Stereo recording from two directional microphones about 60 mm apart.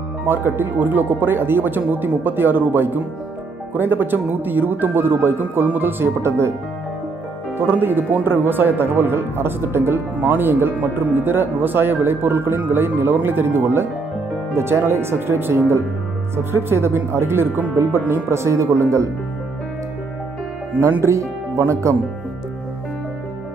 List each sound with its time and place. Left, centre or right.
0.3 s speech: right
7.5 s speech: right
21.0 s speech: right